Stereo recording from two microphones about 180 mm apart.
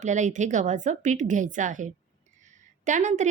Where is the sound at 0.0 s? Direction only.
40° right (ahead or behind).